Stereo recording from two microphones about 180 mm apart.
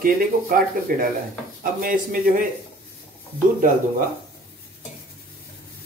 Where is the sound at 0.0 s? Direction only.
50° right (ahead or behind).